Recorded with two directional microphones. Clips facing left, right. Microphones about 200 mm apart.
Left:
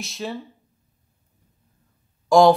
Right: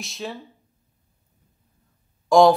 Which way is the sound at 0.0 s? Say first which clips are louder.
Left 2 dB; centre (ahead or behind).